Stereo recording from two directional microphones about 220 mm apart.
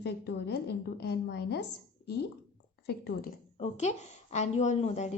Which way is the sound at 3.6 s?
30° left (ahead or behind).